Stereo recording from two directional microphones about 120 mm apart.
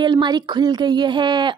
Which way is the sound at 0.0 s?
40° right (ahead or behind).